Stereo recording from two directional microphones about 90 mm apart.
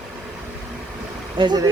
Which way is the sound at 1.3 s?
55° right (ahead or behind).